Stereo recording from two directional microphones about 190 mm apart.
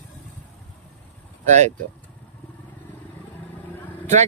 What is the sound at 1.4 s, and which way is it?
Speech, 35° right (ahead or behind).